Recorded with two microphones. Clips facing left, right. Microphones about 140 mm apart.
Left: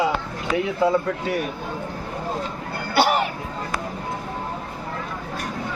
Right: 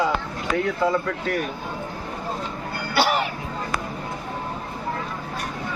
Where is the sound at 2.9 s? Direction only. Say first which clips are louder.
Left 2 dB; 55° left (ahead or behind).